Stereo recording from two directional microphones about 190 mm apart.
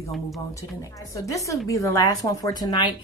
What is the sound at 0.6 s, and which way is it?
A woman's voice, 15° left (ahead or behind).